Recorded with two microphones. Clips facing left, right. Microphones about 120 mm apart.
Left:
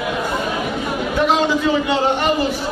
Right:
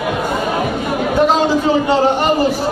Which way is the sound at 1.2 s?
40° right (ahead or behind).